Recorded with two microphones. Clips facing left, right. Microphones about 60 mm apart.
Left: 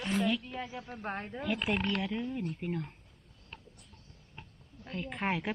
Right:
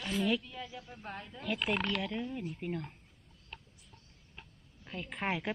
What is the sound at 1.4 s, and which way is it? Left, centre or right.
Speech, centre.